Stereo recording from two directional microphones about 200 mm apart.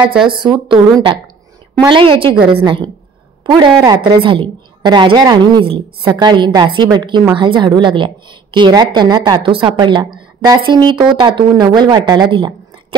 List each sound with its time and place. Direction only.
0.3 s a woman's voice: 25° right (ahead or behind)